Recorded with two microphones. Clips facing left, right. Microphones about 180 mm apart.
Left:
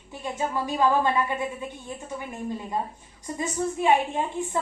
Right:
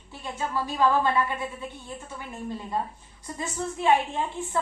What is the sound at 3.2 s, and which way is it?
Speech, 15° left (ahead or behind).